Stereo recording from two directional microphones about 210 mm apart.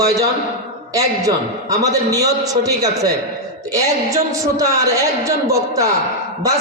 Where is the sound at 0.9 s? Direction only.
15° right (ahead or behind).